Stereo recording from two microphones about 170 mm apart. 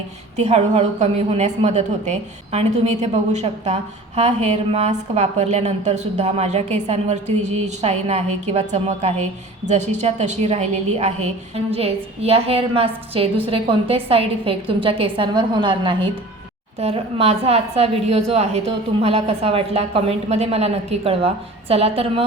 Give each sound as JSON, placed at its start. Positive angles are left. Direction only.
{"t": 0.3, "sound": "a woman's voice", "side_deg": -40}